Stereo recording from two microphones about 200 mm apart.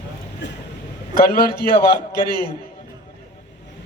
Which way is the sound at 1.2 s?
50° left (ahead or behind).